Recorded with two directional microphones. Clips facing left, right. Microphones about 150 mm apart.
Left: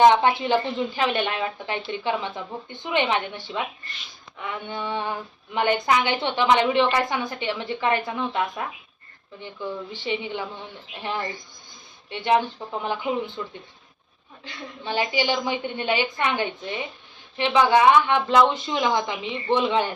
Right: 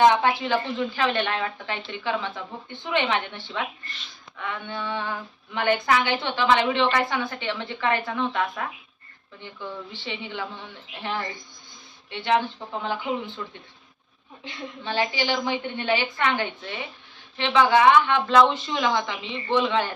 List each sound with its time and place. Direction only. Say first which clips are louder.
0.0 s speech: left 2 dB; 20° left (ahead or behind)
12.1 s speech: left 2 dB; 15° left (ahead or behind)
14.4 s a woman's voice: right 2 dB; 25° right (ahead or behind)
14.8 s speech: left 2 dB; 15° left (ahead or behind)